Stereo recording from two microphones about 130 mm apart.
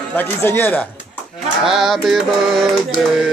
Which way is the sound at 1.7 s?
Centre (ahead or behind).